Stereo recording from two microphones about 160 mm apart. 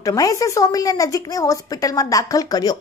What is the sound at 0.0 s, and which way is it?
Speech, 20° left (ahead or behind).